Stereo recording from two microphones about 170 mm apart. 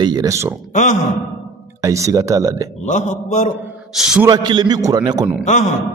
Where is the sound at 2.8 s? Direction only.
45° left (ahead or behind).